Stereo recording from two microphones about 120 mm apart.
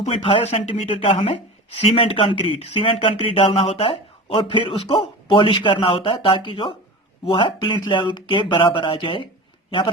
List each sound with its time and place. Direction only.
0.0 s a man's voice: 50° left (ahead or behind)